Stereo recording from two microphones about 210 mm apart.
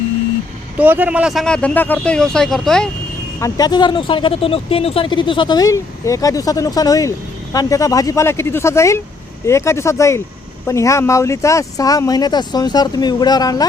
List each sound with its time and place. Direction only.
0.8 s speech: 10° right (ahead or behind)
3.4 s speech: 20° left (ahead or behind)